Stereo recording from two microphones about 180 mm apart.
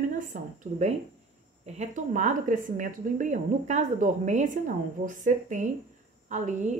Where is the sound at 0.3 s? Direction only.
40° right (ahead or behind).